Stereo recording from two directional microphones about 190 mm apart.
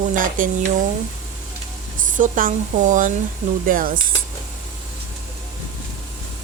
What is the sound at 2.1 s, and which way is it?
Speech, 45° right (ahead or behind).